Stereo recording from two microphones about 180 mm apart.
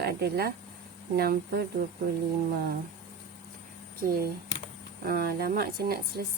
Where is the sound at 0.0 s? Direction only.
60° right (ahead or behind).